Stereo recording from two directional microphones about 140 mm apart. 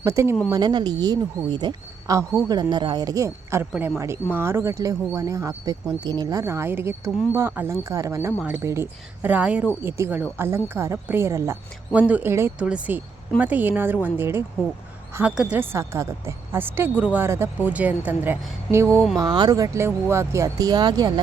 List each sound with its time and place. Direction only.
0.0 s speech: 20° right (ahead or behind)
18.9 s speech: centre (ahead or behind)
19.2 s speech: 30° right (ahead or behind)